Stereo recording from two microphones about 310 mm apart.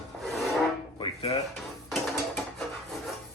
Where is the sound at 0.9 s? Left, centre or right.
Centre.